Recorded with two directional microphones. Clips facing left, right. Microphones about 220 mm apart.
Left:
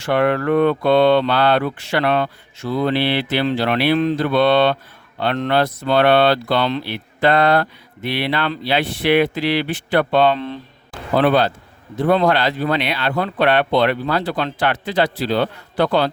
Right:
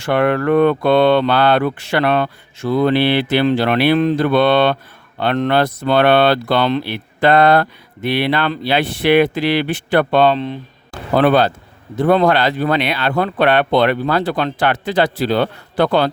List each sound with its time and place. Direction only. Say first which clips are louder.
0.0 s speech: right 2 dB; 55° right (ahead or behind)
10.3 s speech: right 3 dB; 20° right (ahead or behind)
11.2 s speech: right 2 dB; 50° right (ahead or behind)